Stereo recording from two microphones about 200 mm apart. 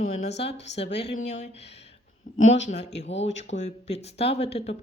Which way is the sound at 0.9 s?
55° left (ahead or behind).